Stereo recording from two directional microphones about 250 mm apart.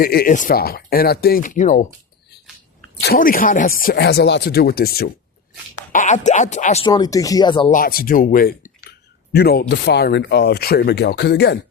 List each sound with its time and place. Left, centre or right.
0.0 s speech: left
3.0 s speech: left; by 7.7 s centre
7.7 s speech: left